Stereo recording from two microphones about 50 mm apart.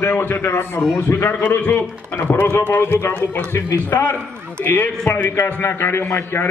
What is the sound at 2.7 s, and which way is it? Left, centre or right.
Speech, left.